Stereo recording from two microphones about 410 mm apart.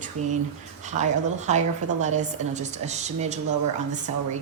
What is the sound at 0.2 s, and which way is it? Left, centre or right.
Speech, right.